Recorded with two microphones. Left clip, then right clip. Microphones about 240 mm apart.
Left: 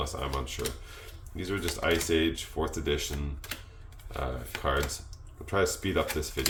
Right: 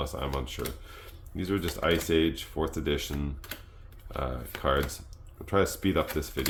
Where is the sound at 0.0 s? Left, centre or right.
Right.